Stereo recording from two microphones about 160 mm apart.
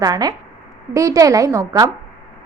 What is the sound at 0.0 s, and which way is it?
A woman's voice, 25° right (ahead or behind).